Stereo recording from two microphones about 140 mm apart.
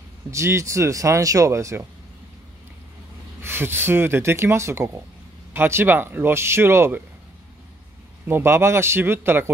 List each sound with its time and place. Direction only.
0.3 s speech: 20° right (ahead or behind)
3.4 s speech: 15° right (ahead or behind)
8.3 s speech: 15° right (ahead or behind)